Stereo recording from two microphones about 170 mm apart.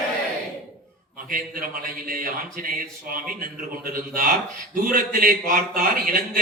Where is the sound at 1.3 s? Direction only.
55° right (ahead or behind).